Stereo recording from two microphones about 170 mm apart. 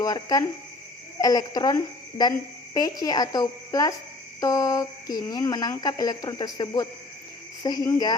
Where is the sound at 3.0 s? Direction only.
20° left (ahead or behind).